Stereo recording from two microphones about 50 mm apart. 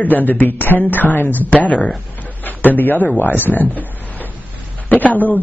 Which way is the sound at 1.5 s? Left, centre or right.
Left.